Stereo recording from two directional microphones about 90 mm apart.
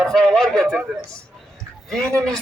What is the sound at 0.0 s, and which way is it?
Speech, 5° left (ahead or behind).